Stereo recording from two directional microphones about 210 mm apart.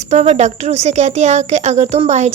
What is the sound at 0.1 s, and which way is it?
Speech, 30° right (ahead or behind).